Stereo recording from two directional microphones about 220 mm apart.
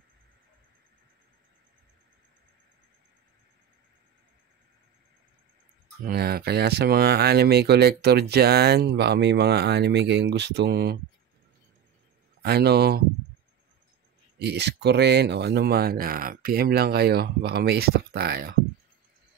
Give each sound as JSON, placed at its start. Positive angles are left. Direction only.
{"t": 6.0, "sound": "speech", "side_deg": -45}
{"t": 12.4, "sound": "speech", "side_deg": -45}
{"t": 14.4, "sound": "speech", "side_deg": -50}